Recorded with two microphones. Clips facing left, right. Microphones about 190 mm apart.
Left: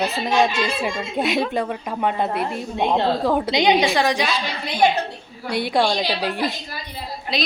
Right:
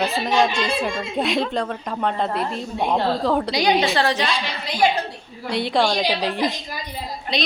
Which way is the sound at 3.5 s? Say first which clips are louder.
Left 2 dB; 20° left (ahead or behind).